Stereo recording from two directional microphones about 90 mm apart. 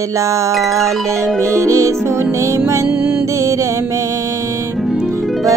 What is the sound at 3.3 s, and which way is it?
Music, 35° right (ahead or behind).